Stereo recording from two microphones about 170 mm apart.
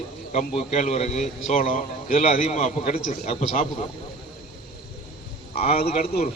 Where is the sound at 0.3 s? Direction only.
40° left (ahead or behind).